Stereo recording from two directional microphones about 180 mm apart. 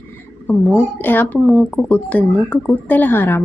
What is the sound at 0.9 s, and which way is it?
Speech, 10° left (ahead or behind).